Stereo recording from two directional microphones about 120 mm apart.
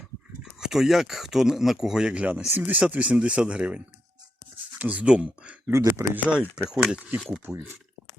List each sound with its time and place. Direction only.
0.6 s speech: 5° right (ahead or behind)
5.7 s speech: 25° right (ahead or behind)
6.7 s speech: 5° right (ahead or behind)
7.4 s speech: 20° right (ahead or behind)